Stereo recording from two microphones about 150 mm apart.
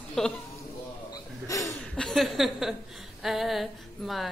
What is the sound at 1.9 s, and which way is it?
A woman's voice, 5° left (ahead or behind).